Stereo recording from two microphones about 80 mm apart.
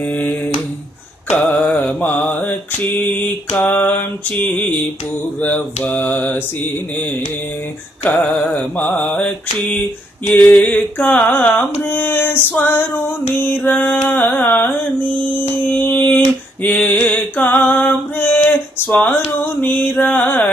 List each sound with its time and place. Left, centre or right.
0.0 s carnatic music: left
1.3 s mantra: centre
3.6 s carnatic music: left
14.1 s music: left